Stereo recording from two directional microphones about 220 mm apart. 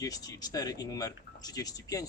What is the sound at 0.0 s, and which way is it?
Speech, 15° left (ahead or behind).